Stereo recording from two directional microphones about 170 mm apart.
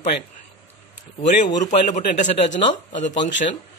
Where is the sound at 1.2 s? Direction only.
50° left (ahead or behind).